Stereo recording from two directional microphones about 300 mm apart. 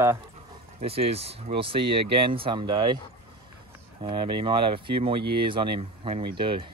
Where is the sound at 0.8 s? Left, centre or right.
Centre.